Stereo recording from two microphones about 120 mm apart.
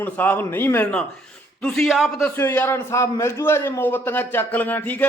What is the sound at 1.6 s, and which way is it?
Speech, 5° left (ahead or behind).